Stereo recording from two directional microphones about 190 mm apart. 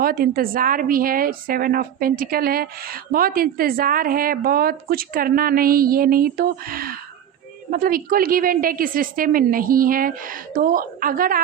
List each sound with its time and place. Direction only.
0.0 s a woman's voice: 50° right (ahead or behind)